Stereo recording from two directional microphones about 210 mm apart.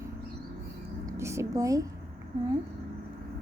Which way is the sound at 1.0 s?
15° right (ahead or behind).